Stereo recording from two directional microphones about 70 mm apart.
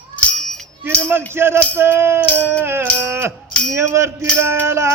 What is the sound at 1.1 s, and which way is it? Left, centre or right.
Music, right.